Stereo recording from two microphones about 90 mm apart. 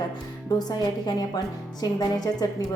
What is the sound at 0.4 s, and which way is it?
A woman's voice, 45° left (ahead or behind).